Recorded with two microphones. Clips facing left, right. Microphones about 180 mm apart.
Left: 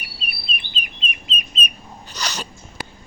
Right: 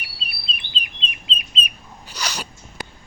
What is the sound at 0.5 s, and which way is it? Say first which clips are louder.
Chirp: left 2 dB; 30° right (ahead or behind).